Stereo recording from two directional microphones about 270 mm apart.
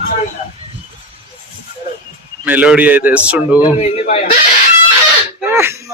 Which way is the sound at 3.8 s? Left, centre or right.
Left.